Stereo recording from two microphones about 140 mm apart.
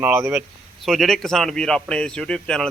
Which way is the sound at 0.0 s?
20° right (ahead or behind).